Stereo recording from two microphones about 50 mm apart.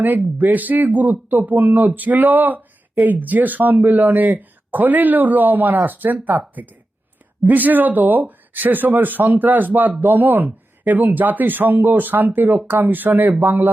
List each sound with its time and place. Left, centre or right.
0.3 s speech: right